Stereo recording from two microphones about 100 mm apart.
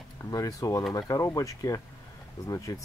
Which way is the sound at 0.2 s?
35° left (ahead or behind).